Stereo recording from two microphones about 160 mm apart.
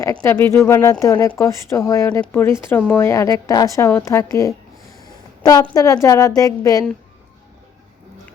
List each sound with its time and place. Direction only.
0.0 s a woman's voice: 20° left (ahead or behind)
5.7 s speech: 20° left (ahead or behind)